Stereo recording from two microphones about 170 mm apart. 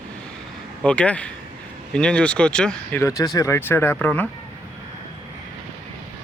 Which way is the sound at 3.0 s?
20° left (ahead or behind).